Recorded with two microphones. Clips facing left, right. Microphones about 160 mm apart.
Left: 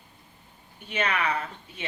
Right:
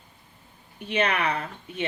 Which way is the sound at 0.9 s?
35° right (ahead or behind).